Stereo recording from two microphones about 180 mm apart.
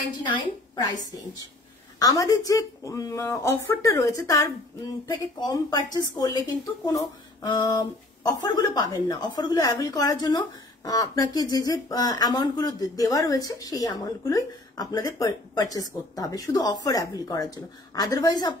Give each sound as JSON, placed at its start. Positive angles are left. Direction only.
{"t": 0.3, "sound": "speech", "side_deg": 20}
{"t": 2.0, "sound": "speech", "side_deg": 20}